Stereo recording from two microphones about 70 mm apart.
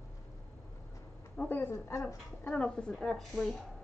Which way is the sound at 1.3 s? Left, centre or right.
Left.